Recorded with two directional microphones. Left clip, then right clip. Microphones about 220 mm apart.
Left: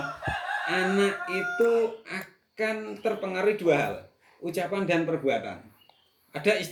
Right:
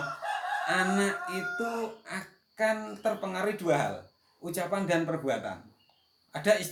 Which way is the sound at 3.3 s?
20° right (ahead or behind).